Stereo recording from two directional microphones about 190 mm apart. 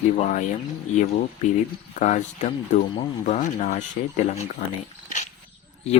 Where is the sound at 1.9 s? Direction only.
40° left (ahead or behind).